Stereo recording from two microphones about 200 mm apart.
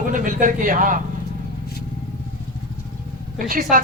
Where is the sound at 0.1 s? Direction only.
40° right (ahead or behind).